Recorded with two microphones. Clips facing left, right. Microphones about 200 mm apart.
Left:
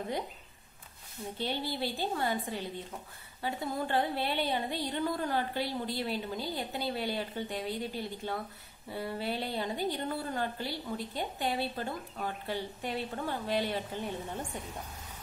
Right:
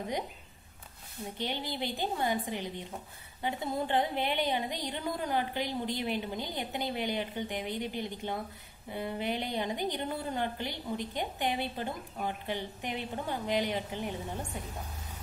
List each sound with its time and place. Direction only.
1.4 s a woman's voice: 15° right (ahead or behind)
3.4 s a woman's voice: 20° right (ahead or behind)